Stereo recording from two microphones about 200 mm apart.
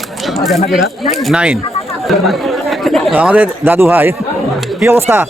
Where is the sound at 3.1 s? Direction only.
10° right (ahead or behind).